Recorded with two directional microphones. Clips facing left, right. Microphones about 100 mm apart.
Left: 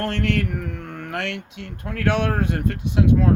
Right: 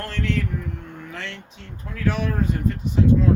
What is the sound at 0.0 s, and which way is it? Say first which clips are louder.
Speech: left 3 dB; 60° left (ahead or behind).